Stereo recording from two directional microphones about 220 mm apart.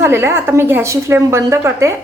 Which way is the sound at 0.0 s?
10° right (ahead or behind).